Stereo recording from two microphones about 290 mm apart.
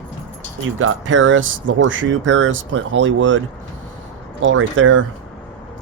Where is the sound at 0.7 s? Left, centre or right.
Right.